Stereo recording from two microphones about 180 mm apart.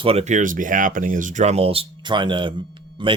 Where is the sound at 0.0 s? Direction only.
35° right (ahead or behind).